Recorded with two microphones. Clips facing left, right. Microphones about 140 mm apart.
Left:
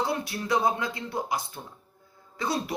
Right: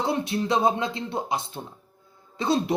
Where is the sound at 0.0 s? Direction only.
25° right (ahead or behind).